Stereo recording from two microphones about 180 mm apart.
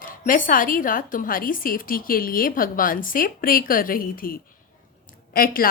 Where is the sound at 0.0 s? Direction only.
50° left (ahead or behind).